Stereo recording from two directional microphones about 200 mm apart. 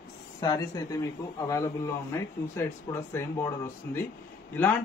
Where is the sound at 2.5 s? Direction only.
15° left (ahead or behind).